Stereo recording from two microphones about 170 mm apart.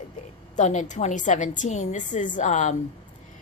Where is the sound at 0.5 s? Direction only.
45° left (ahead or behind).